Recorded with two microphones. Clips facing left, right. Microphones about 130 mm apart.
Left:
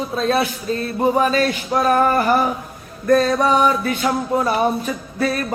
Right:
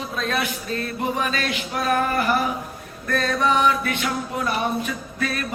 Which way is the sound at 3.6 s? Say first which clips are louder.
Left 4 dB; 35° left (ahead or behind).